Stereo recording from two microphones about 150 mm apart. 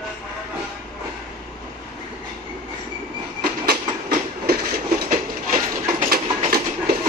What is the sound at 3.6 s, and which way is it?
Train, 90° right.